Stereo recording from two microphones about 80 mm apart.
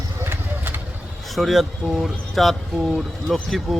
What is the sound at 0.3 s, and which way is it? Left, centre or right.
Vehicle, right.